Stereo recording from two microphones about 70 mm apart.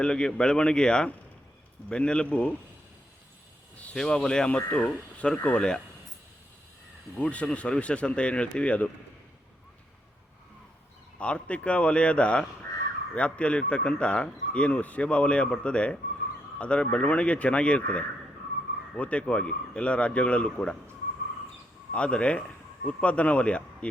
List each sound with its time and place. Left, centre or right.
0.0 s speech: centre
3.9 s speech: centre
7.2 s speech: centre
11.2 s speech: centre
21.9 s speech: centre